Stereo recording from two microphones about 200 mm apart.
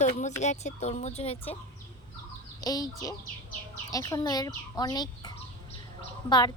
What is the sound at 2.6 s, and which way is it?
Speech, 20° left (ahead or behind).